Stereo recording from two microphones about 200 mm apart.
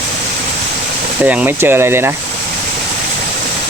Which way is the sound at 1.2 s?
5° right (ahead or behind).